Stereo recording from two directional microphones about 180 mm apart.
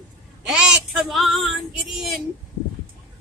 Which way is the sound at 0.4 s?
5° right (ahead or behind).